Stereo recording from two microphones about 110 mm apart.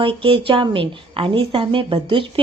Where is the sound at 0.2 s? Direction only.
50° right (ahead or behind).